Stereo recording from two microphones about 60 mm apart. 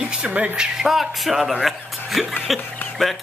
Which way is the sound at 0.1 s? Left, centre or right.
Right.